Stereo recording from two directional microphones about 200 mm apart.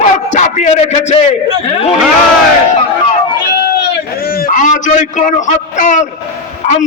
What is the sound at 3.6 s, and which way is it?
A man's voice, 50° left (ahead or behind).